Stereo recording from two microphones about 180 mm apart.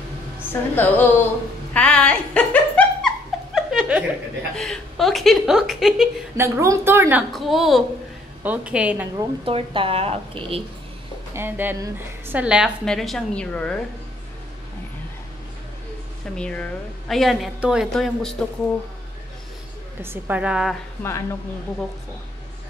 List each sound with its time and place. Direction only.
0.5 s a woman's voice: 10° left (ahead or behind)
1.7 s a sound: 5° left (ahead or behind)
3.5 s chuckle: 5° right (ahead or behind)
4.6 s a woman's voice: centre (ahead or behind)
6.3 s a woman's voice: 15° right (ahead or behind)
7.3 s a woman's voice: centre (ahead or behind)
9.1 s a woman's voice: 30° right (ahead or behind)
11.3 s a woman's voice: 10° right (ahead or behind); by 13.7 s 5° left (ahead or behind)
16.3 s a woman's voice: 5° left (ahead or behind)
20.0 s a woman's voice: 10° right (ahead or behind)
21.0 s a woman's voice: 15° left (ahead or behind)